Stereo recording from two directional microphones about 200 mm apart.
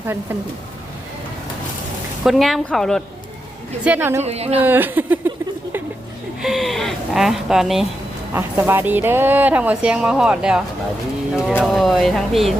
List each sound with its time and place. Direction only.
2.2 s speech: centre (ahead or behind)
3.8 s speech: 10° right (ahead or behind)
4.2 s a woman's voice: 30° right (ahead or behind)
4.6 s speech: 10° right (ahead or behind)
6.4 s speech: centre (ahead or behind)
11.6 s speech: centre (ahead or behind)